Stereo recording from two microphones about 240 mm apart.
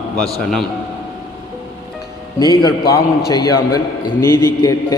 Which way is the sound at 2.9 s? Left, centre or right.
Centre.